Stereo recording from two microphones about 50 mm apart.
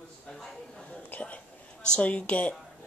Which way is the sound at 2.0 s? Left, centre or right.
Left.